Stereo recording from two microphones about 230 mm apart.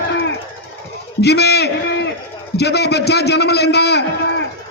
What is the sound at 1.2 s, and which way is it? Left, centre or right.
A man's voice, left.